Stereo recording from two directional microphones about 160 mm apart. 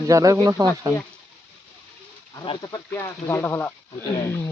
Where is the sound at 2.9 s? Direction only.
15° left (ahead or behind).